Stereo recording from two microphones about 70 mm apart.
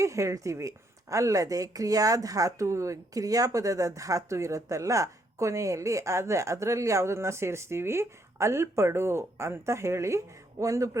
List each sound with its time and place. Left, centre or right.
0.0 s speech: right